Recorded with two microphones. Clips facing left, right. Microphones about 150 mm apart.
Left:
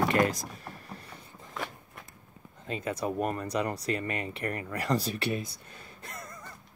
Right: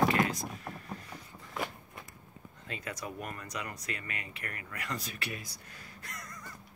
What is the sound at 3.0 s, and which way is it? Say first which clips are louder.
Speech: left 10 dB; 35° left (ahead or behind).